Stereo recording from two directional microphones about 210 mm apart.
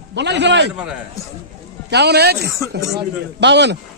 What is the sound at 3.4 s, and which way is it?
Speech, 55° right (ahead or behind).